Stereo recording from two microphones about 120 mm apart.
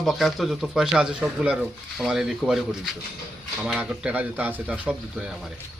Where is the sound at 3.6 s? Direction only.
10° right (ahead or behind).